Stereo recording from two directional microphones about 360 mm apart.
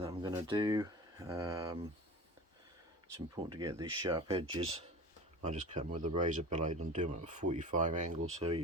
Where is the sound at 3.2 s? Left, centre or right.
Centre.